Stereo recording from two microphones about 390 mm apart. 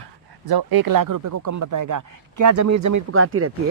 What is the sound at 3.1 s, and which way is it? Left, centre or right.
Speech, right.